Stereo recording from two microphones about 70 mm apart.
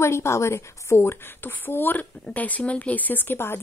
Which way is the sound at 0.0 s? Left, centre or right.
Left.